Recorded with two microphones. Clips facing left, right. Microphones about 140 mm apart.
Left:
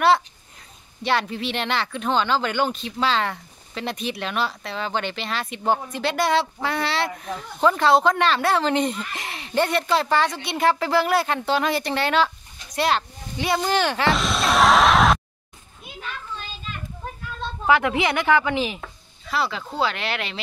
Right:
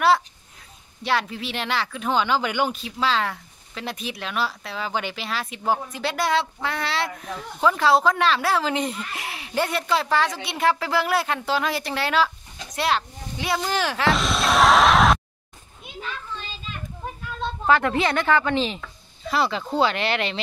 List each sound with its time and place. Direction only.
1.0 s speech: centre (ahead or behind)
17.6 s speech: 15° left (ahead or behind)